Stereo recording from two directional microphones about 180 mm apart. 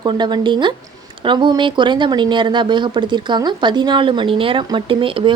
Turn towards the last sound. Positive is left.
turn(degrees=-30)  # may be behind; listen again after turning